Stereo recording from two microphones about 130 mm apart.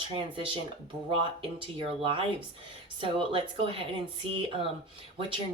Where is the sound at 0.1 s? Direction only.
40° right (ahead or behind).